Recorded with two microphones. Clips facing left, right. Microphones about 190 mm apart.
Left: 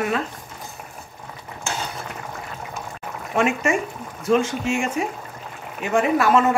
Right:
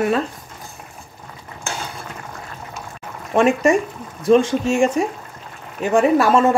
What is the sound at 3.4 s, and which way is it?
Speech, 35° right (ahead or behind).